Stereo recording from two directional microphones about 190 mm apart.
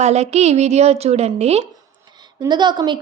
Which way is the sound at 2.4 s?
20° right (ahead or behind).